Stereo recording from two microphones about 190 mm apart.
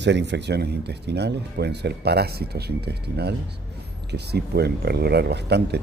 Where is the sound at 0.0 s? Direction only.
65° right (ahead or behind).